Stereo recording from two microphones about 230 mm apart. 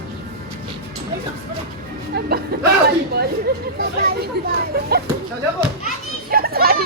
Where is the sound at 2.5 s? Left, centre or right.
Right.